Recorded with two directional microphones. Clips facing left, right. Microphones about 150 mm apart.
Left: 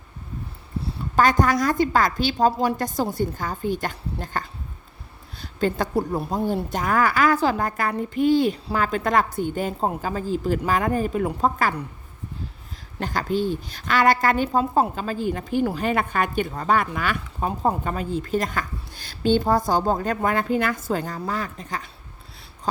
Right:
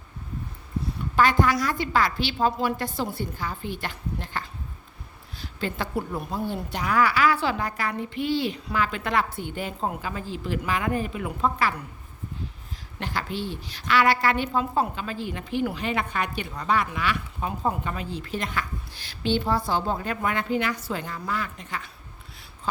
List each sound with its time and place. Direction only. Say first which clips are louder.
1.1 s a woman's voice: left 2 dB; 45° left (ahead or behind)
5.5 s a woman's voice: left 6 dB; 45° left (ahead or behind)
13.0 s a woman's voice: left 7 dB; 45° left (ahead or behind)